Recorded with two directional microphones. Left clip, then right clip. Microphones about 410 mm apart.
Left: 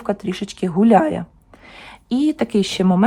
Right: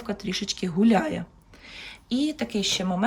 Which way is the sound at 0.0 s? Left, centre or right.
Centre.